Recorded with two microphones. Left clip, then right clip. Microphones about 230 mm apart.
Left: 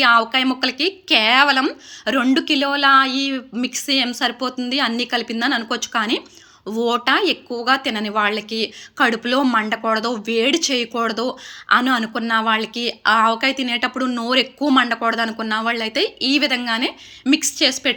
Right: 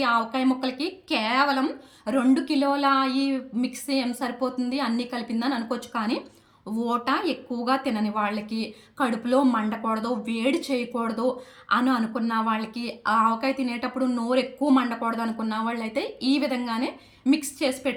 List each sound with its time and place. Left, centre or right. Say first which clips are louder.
0.0 s speech: left 9 dB; centre
10.9 s speech: left 5 dB; left
11.7 s speech: left 7 dB; centre